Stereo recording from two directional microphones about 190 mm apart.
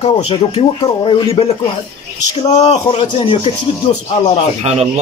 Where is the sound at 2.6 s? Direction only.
35° left (ahead or behind).